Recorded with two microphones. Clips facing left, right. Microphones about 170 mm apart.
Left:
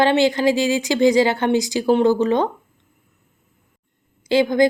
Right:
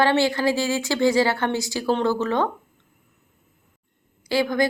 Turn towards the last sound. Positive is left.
turn(degrees=20)  # may be behind; listen again after turning